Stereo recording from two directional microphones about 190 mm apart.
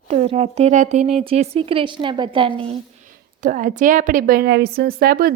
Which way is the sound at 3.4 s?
40° right (ahead or behind).